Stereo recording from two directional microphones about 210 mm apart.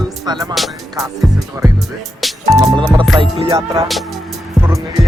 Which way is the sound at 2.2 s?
Centre (ahead or behind).